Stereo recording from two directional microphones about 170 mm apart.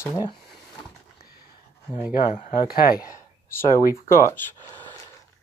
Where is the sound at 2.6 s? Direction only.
60° left (ahead or behind).